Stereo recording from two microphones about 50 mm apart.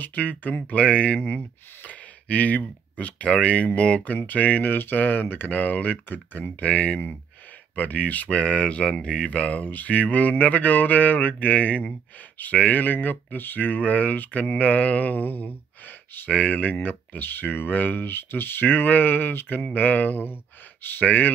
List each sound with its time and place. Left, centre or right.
0.0 s speech: left
1.2 s speech: left